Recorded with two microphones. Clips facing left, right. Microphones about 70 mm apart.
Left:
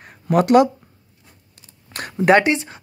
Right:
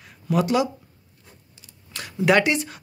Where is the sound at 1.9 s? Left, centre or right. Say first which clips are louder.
Left 4 dB; left.